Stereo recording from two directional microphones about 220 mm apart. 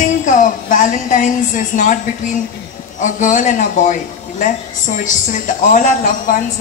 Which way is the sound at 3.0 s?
35° left (ahead or behind).